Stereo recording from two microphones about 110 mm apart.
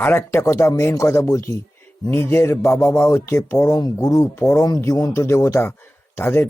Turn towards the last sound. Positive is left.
turn(degrees=20)  # may be behind; listen again after turning